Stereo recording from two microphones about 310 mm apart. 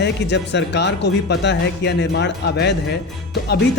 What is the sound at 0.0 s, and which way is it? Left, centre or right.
Speech, left.